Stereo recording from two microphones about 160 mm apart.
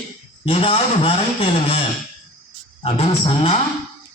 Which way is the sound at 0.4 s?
35° left (ahead or behind).